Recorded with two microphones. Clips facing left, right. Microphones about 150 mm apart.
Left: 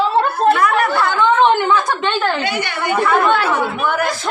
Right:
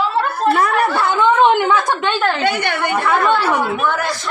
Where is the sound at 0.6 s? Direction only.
35° right (ahead or behind).